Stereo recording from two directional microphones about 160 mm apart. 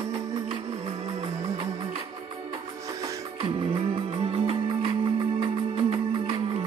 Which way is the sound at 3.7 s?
40° right (ahead or behind).